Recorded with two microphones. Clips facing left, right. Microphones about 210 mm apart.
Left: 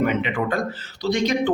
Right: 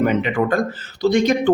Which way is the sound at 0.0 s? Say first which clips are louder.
Right 4 dB; 40° right (ahead or behind).